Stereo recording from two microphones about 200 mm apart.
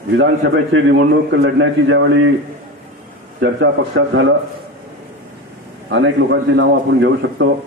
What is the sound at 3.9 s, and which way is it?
Speech, 75° right (ahead or behind).